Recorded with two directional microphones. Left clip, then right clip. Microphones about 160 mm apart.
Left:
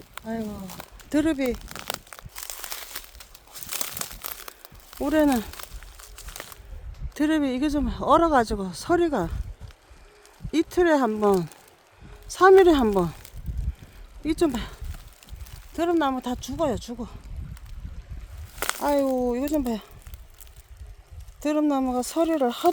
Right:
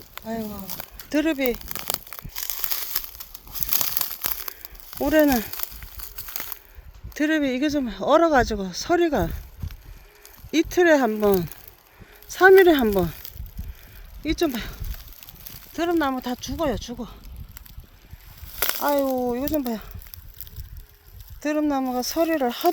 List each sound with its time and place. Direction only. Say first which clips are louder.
0.7 s a sound: right 3 dB; 70° right (ahead or behind)
1.1 s speech: right 1 dB; 10° right (ahead or behind)
1.5 s crumpling: right 2 dB; 75° right (ahead or behind)
5.0 s speech: right 3 dB; 5° right (ahead or behind)
5.4 s a sound: right 3 dB; 70° right (ahead or behind); by 6.6 s 90° right
7.1 s speech: right 1 dB; 5° right (ahead or behind)
10.5 s speech: right 3 dB; 10° right (ahead or behind)
14.3 s speech: even; 5° right (ahead or behind)
14.9 s a sound: right 3 dB; 85° right
15.7 s speech: even; 10° right (ahead or behind)
18.5 s a sound: right 1 dB; 55° right (ahead or behind)
18.8 s speech: right 1 dB; 10° left (ahead or behind)
21.4 s speech: even; 5° left (ahead or behind)